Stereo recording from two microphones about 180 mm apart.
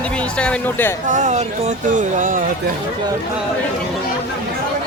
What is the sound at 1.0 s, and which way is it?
Speech, 40° right (ahead or behind).